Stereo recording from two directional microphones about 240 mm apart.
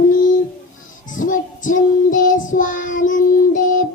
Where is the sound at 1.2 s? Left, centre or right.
Left.